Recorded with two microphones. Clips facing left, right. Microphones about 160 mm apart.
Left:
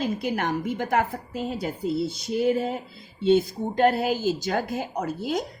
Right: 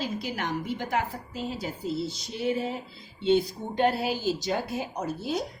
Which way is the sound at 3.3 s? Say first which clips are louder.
Left 3 dB; 45° left (ahead or behind).